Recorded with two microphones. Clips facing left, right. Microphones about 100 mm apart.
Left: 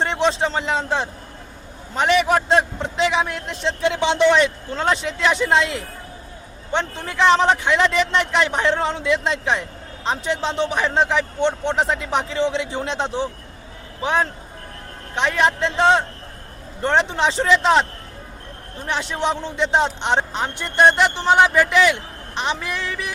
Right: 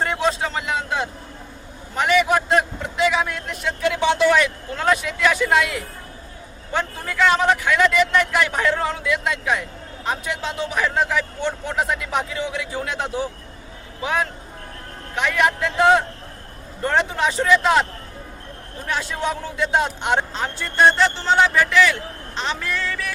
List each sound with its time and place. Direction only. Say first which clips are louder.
0.0 s a man's voice: left 2 dB; 25° left (ahead or behind)
18.9 s a man's voice: left 2 dB; 20° left (ahead or behind)